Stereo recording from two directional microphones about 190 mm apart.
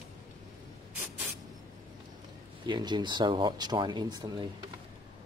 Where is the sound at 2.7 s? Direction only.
25° right (ahead or behind).